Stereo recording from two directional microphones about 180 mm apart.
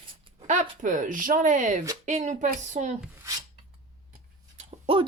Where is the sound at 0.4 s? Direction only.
40° right (ahead or behind).